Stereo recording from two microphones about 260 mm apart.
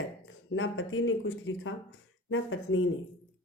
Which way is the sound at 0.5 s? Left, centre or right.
Left.